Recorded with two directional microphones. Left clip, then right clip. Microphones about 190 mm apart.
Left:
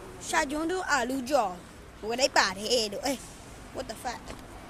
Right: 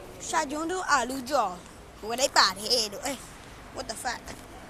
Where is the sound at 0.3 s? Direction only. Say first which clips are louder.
Left 1 dB; 20° left (ahead or behind); by 3.2 s 35° left (ahead or behind).